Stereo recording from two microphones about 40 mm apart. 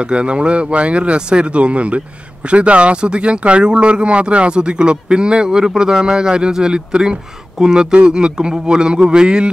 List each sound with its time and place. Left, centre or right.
0.0 s speech: right